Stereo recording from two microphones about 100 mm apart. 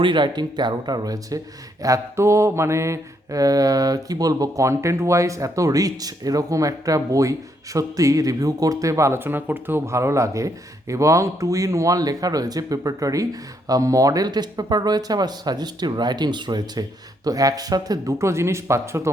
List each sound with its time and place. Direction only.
0.0 s speech: 50° right (ahead or behind)
1.8 s mantra: 30° right (ahead or behind)
13.7 s speech: 35° right (ahead or behind)
17.2 s mantra: 40° right (ahead or behind)